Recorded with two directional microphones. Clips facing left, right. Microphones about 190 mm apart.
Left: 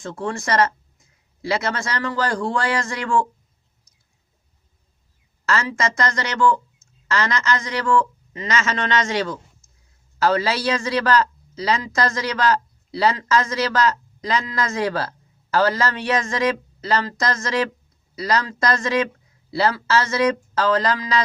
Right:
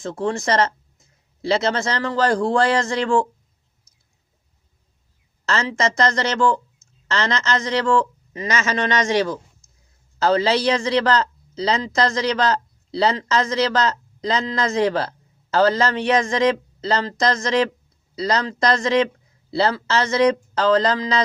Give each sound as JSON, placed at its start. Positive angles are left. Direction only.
{"t": 0.0, "sound": "a man's voice", "side_deg": -25}
{"t": 5.5, "sound": "a man's voice", "side_deg": -20}